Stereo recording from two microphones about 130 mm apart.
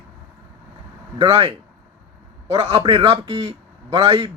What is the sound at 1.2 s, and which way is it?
Speech, 45° right (ahead or behind).